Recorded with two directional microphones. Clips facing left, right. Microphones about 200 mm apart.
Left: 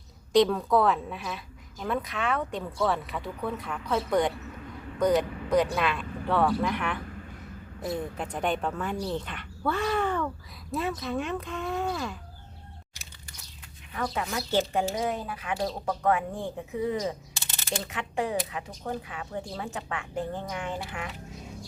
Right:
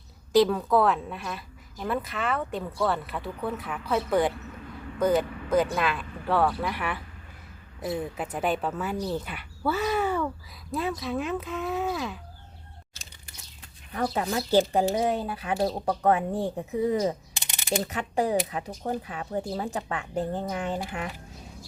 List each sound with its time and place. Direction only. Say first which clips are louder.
0.3 s a woman's voice: right 1 dB; centre (ahead or behind)
13.9 s speech: right 4 dB; 35° right (ahead or behind)
17.3 s a sound: right 5 dB; 15° right (ahead or behind)
17.8 s speech: right 2 dB; 40° right (ahead or behind)